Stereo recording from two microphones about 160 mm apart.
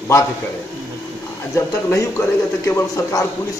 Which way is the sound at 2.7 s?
20° left (ahead or behind).